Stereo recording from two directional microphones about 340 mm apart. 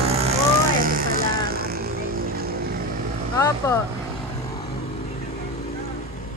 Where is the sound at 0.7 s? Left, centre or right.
Right.